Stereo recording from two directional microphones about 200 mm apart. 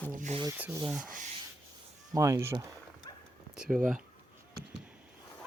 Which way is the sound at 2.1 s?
15° right (ahead or behind).